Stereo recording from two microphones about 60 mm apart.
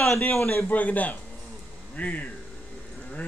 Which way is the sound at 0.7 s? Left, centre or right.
Left.